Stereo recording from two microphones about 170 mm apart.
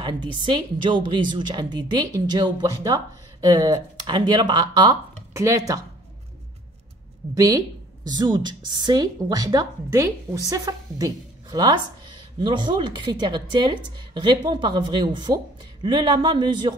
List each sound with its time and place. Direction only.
0.0 s a woman's voice: 25° right (ahead or behind)
7.3 s a woman's voice: 20° right (ahead or behind)